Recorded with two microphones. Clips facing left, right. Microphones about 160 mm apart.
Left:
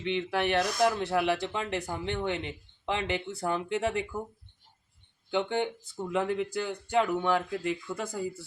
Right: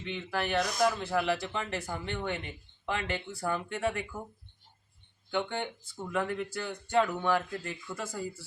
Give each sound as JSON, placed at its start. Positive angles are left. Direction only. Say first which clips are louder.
{"t": 0.0, "sound": "speech", "louder": "left 5 dB", "side_deg": 75}
{"t": 0.8, "sound": "speech", "louder": "left 2 dB", "side_deg": 0}
{"t": 5.3, "sound": "speech", "louder": "left 4 dB", "side_deg": 15}